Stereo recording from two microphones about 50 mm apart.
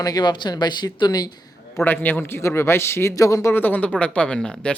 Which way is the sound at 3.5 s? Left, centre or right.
Left.